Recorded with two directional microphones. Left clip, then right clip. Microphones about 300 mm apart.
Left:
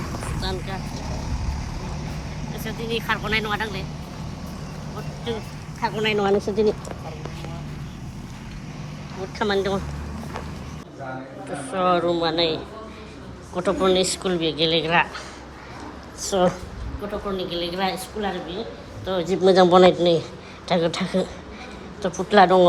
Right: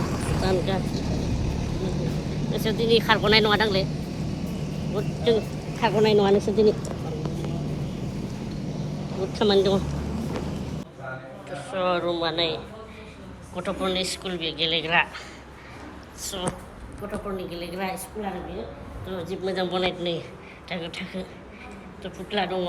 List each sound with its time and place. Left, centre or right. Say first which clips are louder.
0.0 s vehicle: right 3 dB; centre
2.0 s speech: right 4 dB; centre
4.6 s vehicle: right 7 dB; centre
6.1 s a woman's voice: right 1 dB; centre
9.4 s a woman's voice: right 2 dB; centre
11.5 s a woman's voice: left 4 dB; centre
16.3 s speech: left 12 dB; left
17.6 s a woman's voice: left 6 dB; centre
19.3 s speech: left 13 dB; left